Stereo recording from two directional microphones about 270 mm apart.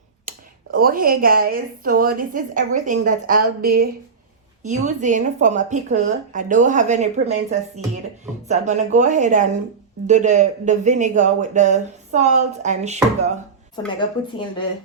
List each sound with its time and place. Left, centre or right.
0.3 s speech: right
8.4 s speech: right
13.8 s a woman's voice: centre